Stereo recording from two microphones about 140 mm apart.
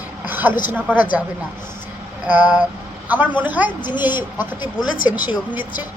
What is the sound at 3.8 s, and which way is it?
Speech, 35° left (ahead or behind).